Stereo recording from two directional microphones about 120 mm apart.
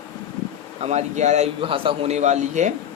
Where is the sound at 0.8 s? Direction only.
70° right (ahead or behind).